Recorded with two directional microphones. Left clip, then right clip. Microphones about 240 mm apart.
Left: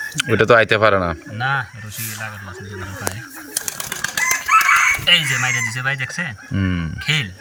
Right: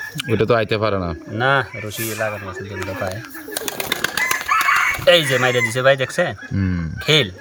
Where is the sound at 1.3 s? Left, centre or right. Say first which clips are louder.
Right 5 dB; right.